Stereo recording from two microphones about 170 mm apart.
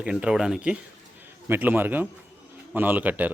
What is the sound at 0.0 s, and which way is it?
Speech, 5° right (ahead or behind).